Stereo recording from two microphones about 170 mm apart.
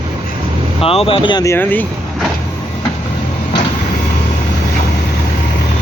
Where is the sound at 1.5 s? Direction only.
10° left (ahead or behind).